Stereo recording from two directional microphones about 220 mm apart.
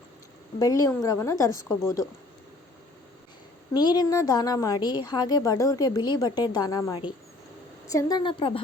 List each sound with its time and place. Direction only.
0.6 s a woman's voice: 15° left (ahead or behind)
3.8 s a woman's voice: 20° left (ahead or behind)